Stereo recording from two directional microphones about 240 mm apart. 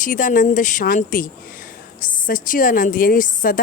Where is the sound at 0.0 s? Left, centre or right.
Left.